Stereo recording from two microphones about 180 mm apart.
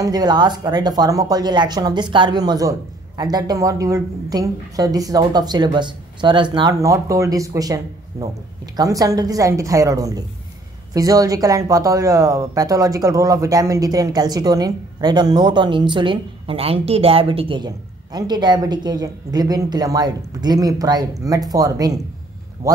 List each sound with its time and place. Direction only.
0.0 s speech: 20° right (ahead or behind)